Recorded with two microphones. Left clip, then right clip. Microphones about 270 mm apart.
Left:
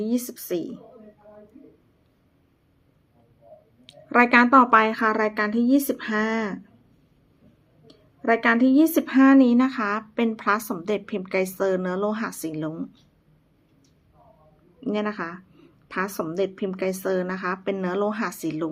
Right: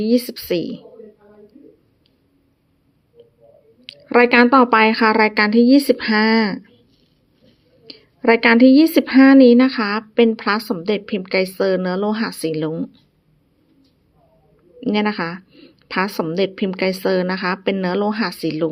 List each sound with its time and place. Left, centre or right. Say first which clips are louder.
0.0 s a woman's voice: right 9 dB; centre
4.1 s a woman's voice: right 4 dB; right
8.2 s a woman's voice: right 8 dB; right
14.8 s a woman's voice: right 7 dB; right